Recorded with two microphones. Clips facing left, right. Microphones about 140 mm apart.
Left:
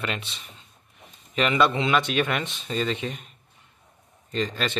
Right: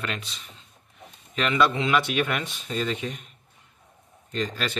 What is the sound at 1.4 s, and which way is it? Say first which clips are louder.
Speech: left 1 dB; centre (ahead or behind).